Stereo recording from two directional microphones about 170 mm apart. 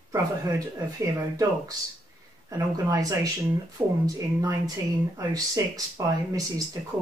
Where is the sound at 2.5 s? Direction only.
20° right (ahead or behind).